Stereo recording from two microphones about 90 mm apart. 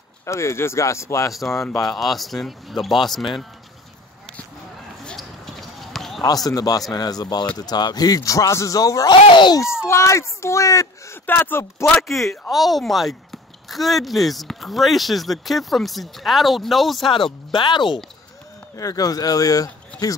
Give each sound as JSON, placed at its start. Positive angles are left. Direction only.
{"t": 0.2, "sound": "speech", "side_deg": 30}
{"t": 1.3, "sound": "speech", "side_deg": 0}
{"t": 5.0, "sound": "basketball bounce", "side_deg": 0}
{"t": 6.2, "sound": "speech", "side_deg": 45}
{"t": 9.1, "sound": "speech", "side_deg": 60}
{"t": 9.6, "sound": "speech", "side_deg": 30}
{"t": 11.2, "sound": "speech", "side_deg": 25}
{"t": 12.0, "sound": "speech", "side_deg": 0}
{"t": 17.1, "sound": "speech", "side_deg": 70}
{"t": 18.8, "sound": "speech", "side_deg": 40}